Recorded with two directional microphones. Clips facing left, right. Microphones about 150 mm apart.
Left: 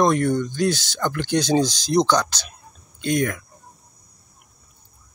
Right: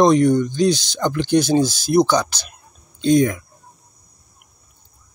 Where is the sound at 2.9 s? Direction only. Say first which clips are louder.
Right 7 dB; 20° right (ahead or behind).